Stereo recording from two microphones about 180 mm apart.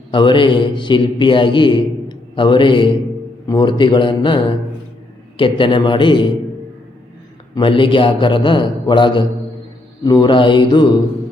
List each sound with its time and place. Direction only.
0.1 s a man's voice: 25° left (ahead or behind)
7.5 s a man's voice: 30° left (ahead or behind)